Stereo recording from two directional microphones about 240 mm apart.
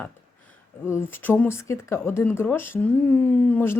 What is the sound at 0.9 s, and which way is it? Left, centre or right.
Speech, centre.